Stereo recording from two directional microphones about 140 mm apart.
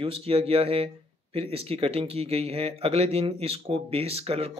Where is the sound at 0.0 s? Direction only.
45° right (ahead or behind).